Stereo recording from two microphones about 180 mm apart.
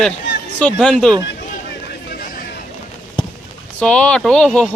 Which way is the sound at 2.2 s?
55° left (ahead or behind).